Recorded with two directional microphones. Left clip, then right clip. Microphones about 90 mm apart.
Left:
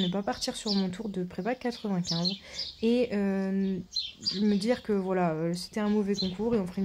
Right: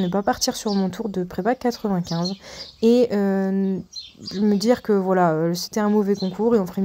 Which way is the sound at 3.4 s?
15° right (ahead or behind).